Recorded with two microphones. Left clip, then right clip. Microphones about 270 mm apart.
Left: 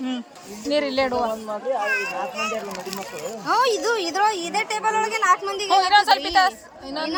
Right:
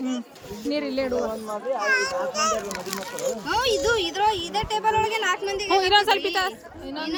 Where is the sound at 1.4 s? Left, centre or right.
Left.